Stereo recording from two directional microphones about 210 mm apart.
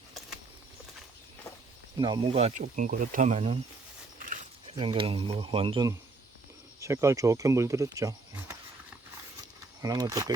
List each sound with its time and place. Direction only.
2.0 s speech: 20° right (ahead or behind)
4.2 s keys jangling: 40° right (ahead or behind)
4.7 s speech: 25° right (ahead or behind)
9.4 s a sound: 20° right (ahead or behind)